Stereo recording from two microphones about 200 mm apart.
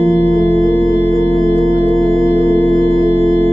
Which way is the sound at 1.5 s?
30° right (ahead or behind).